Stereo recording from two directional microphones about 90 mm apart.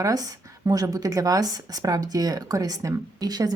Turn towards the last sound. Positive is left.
turn(degrees=-45)  # may be behind; listen again after turning